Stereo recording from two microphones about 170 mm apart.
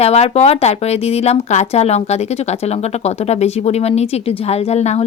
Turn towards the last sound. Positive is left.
turn(degrees=40)  # may be behind; listen again after turning